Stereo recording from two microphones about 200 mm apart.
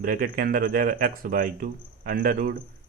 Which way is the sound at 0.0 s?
45° right (ahead or behind).